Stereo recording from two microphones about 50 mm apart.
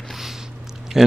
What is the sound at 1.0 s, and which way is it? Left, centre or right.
Speech, centre.